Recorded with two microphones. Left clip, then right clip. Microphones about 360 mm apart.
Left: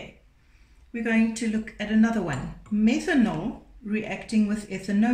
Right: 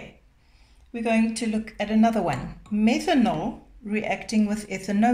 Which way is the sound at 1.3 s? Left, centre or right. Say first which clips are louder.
Right 2 dB; centre.